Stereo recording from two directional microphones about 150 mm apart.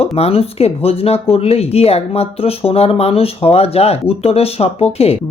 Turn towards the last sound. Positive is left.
turn(degrees=45)  # may be behind; listen again after turning